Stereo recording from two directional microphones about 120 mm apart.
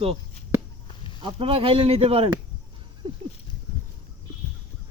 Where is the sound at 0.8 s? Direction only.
45° left (ahead or behind).